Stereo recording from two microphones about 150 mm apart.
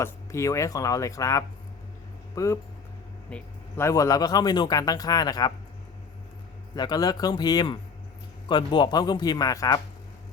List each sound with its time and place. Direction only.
0.0 s speech: 20° left (ahead or behind)
3.2 s a sound: 10° left (ahead or behind)
3.8 s speech: 20° left (ahead or behind)
6.7 s speech: 25° left (ahead or behind)